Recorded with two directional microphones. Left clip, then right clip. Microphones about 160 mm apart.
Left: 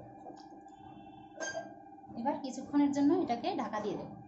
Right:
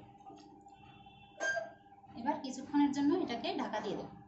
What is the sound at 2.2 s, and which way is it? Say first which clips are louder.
A woman's voice: left 1 dB; 90° left.